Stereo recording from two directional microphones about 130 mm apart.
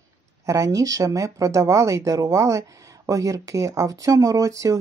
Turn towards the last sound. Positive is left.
turn(degrees=-25)  # may be behind; listen again after turning